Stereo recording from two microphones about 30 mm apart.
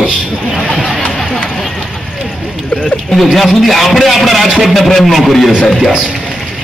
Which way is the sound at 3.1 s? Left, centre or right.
Centre.